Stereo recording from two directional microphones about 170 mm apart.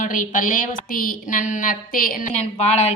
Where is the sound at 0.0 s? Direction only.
50° left (ahead or behind).